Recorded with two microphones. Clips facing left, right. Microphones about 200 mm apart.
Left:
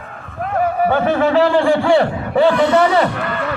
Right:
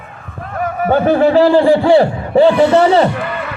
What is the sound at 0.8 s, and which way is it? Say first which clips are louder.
Speech: right 7 dB; 35° right (ahead or behind).